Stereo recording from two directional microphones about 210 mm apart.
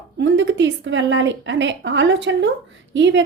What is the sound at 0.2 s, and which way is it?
Speech, 60° right (ahead or behind).